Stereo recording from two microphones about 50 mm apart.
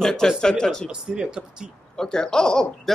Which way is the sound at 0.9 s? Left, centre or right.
Centre.